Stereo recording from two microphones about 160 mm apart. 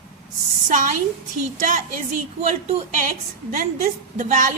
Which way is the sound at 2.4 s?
50° right (ahead or behind).